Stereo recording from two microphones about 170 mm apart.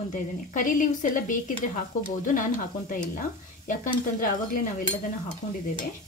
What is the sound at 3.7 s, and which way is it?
Speech, 50° left (ahead or behind).